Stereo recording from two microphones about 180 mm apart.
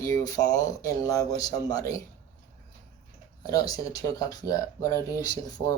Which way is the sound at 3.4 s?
20° left (ahead or behind).